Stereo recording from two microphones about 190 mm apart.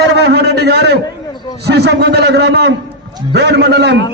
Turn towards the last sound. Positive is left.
turn(degrees=-65)  # may be behind; listen again after turning